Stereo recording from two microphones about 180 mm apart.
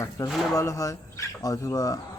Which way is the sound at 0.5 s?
15° left (ahead or behind).